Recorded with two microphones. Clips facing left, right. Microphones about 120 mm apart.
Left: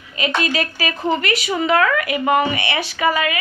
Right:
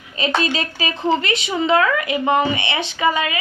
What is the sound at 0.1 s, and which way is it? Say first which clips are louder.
A woman's voice: even; 30° right (ahead or behind).